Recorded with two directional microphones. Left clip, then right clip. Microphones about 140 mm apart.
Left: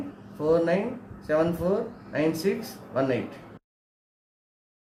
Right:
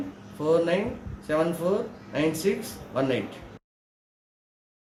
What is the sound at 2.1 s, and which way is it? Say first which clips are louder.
Speech: even; 10° left (ahead or behind).